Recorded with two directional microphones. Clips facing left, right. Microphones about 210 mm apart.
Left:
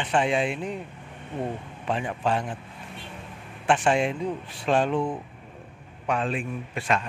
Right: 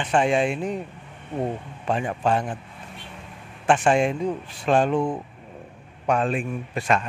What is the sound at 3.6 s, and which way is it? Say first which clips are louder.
A man's voice: right 3 dB; 45° right (ahead or behind).